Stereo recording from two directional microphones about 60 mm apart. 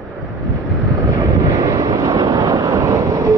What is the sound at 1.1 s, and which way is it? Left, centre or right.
Vehicle, right.